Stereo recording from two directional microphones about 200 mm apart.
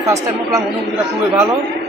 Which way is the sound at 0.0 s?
15° right (ahead or behind).